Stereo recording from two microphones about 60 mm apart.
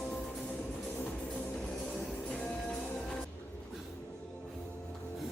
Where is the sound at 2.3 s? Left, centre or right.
Left.